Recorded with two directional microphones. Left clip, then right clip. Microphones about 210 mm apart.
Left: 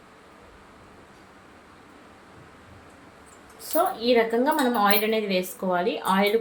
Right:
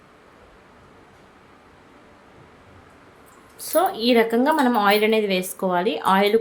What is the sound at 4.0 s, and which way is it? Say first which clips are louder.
A woman's voice: right 3 dB; 40° right (ahead or behind).